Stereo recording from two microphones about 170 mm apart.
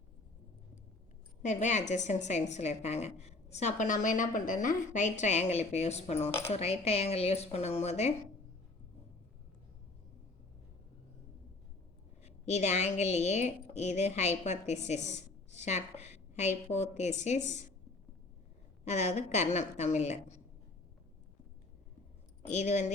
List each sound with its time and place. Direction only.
1.4 s a woman's voice: 45° left (ahead or behind)
12.2 s a woman's voice: 40° left (ahead or behind)
18.9 s speech: 40° left (ahead or behind)
22.4 s a woman's voice: 40° left (ahead or behind)